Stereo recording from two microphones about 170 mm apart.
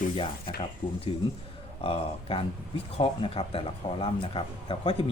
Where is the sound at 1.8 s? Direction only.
30° left (ahead or behind).